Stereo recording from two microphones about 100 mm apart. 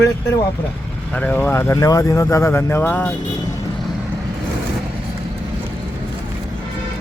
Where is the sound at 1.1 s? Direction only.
20° left (ahead or behind).